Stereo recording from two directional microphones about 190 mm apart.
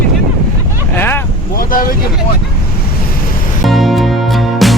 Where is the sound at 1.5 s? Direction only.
50° left (ahead or behind).